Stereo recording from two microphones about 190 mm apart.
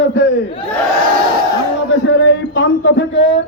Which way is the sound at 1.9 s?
65° left (ahead or behind).